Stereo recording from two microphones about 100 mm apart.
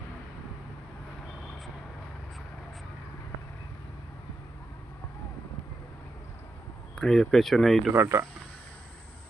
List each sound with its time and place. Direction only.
6.9 s speech: 5° left (ahead or behind)
7.9 s speech: 25° right (ahead or behind)